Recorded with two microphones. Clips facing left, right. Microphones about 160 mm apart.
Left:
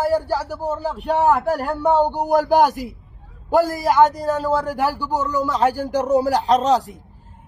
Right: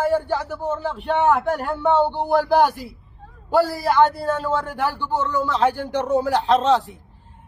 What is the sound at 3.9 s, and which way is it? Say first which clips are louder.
A man's voice: left 2 dB; 40° left (ahead or behind).